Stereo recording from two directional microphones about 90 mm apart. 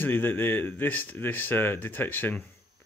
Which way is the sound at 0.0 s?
25° left (ahead or behind).